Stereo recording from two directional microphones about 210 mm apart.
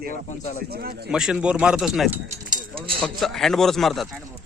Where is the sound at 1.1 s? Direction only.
5° right (ahead or behind).